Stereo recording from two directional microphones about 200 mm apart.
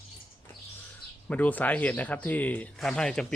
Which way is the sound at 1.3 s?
5° left (ahead or behind).